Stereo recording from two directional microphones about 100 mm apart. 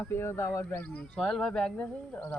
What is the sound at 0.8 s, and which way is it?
Speech, 10° left (ahead or behind).